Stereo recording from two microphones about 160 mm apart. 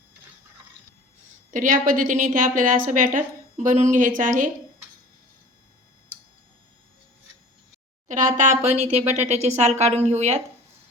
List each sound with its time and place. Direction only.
1.5 s a woman's voice: 55° right (ahead or behind)
8.0 s a woman's voice: 50° right (ahead or behind)